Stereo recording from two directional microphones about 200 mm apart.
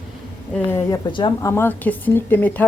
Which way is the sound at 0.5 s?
10° left (ahead or behind).